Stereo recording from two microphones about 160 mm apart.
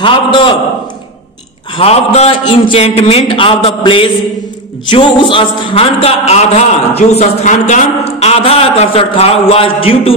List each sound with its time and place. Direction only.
0.0 s a man's voice: 30° left (ahead or behind)
1.8 s a man's voice: 40° left (ahead or behind)